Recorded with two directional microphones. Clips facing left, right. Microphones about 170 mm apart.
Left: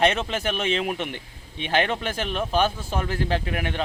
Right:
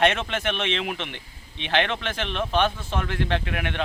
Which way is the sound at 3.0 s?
35° left (ahead or behind).